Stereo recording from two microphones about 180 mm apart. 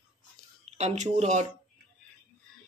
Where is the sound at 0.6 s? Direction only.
40° right (ahead or behind).